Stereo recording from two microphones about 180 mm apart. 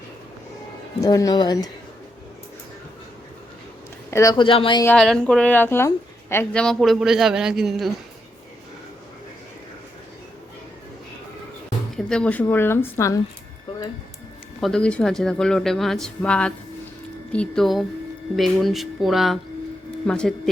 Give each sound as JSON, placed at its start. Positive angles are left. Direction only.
{"t": 1.0, "sound": "speech", "side_deg": 20}
{"t": 4.1, "sound": "speech", "side_deg": 20}
{"t": 4.8, "sound": "a woman's voice", "side_deg": 10}
{"t": 11.9, "sound": "speech", "side_deg": 5}
{"t": 14.6, "sound": "a woman's voice", "side_deg": 5}